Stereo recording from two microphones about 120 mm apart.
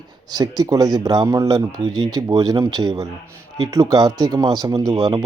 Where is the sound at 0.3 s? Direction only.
35° right (ahead or behind).